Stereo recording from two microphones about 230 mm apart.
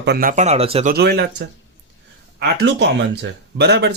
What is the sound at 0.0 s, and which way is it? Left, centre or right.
Speech, right.